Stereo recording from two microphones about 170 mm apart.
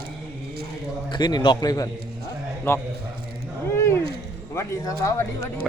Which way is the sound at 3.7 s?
15° left (ahead or behind).